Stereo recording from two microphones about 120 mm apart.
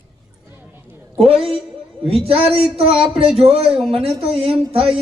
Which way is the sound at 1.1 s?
55° right (ahead or behind).